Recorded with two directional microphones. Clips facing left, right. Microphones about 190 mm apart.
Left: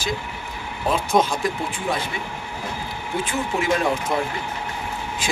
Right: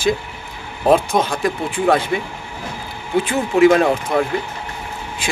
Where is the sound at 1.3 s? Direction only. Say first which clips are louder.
Right 4 dB; 55° right (ahead or behind).